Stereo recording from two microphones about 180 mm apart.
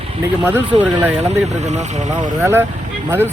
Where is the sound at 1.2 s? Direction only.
40° right (ahead or behind).